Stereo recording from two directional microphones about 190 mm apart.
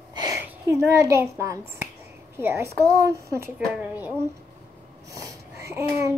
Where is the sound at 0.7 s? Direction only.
15° right (ahead or behind).